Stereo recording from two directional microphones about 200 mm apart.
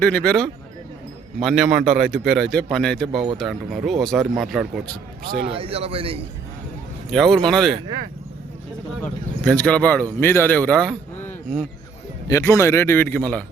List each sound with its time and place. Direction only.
0.0 s speech: 5° left (ahead or behind)
5.5 s speech: 30° right (ahead or behind)
7.1 s speech: centre (ahead or behind)
9.0 s speech: 5° left (ahead or behind)